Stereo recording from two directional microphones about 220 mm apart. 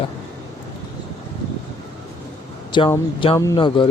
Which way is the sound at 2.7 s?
20° left (ahead or behind).